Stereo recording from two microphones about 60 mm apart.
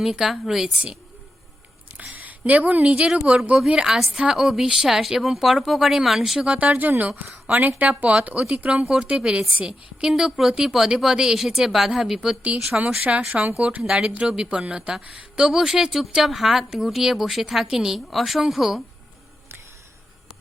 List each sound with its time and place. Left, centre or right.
0.0 s speech: centre
2.0 s a woman's voice: right; by 6.4 s centre
6.4 s speech: right; by 12.4 s centre
13.0 s a woman's voice: right; by 18.8 s centre